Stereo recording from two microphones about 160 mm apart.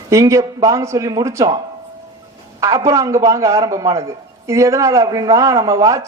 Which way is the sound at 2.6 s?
20° right (ahead or behind).